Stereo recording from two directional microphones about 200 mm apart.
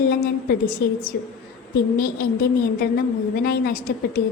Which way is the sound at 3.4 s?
50° left (ahead or behind).